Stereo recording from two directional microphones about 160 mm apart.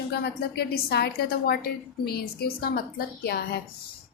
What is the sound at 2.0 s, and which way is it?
A woman's voice, 75° left (ahead or behind).